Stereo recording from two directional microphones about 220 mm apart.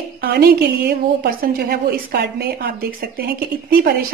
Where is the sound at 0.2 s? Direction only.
45° right (ahead or behind).